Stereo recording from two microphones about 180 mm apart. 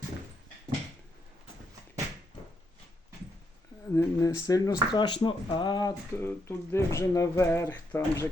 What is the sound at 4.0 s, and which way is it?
Speech, 15° left (ahead or behind).